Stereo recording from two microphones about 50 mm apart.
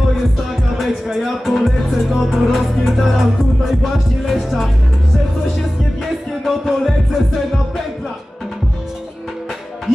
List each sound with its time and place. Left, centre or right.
0.7 s music: centre
6.4 s music: centre